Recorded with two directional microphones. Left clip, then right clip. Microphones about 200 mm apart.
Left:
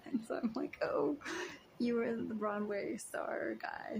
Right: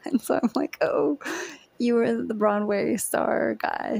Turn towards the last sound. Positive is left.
turn(degrees=-45)  # may be behind; listen again after turning